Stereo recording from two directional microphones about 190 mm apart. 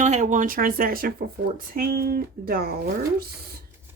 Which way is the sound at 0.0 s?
40° right (ahead or behind).